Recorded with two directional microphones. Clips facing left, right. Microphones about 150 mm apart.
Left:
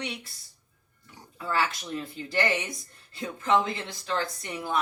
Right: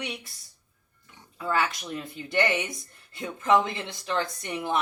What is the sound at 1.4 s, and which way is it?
Speech, 20° right (ahead or behind).